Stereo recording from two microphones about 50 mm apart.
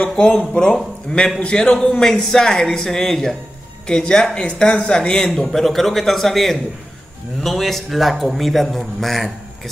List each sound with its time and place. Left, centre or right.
0.2 s speech: left
1.1 s a man's voice: left
1.4 s speech: centre
5.4 s a man's voice: centre